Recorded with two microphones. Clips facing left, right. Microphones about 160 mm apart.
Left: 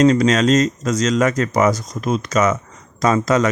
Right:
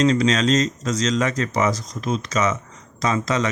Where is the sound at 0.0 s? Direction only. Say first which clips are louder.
Left 4 dB; 50° left (ahead or behind).